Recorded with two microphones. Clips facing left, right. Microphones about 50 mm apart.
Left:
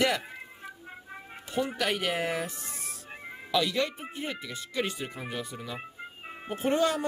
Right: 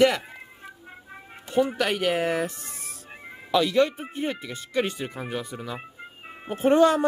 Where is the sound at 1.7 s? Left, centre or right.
Right.